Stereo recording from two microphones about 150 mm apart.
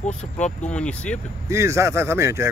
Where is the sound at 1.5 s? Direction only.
20° right (ahead or behind).